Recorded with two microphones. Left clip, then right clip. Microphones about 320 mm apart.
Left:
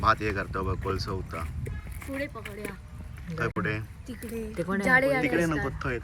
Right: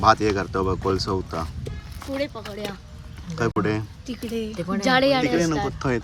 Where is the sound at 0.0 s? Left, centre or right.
Centre.